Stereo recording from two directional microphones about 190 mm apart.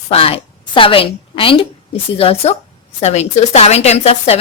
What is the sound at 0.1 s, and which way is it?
A woman's voice, 30° left (ahead or behind).